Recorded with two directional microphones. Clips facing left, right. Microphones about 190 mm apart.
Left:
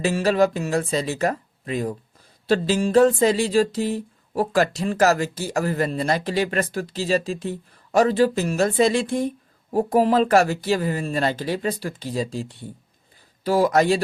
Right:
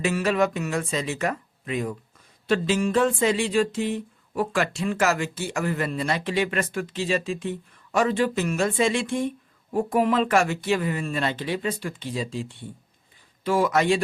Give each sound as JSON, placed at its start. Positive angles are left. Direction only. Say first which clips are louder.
{"t": 0.0, "sound": "speech", "louder": "left 3 dB", "side_deg": 35}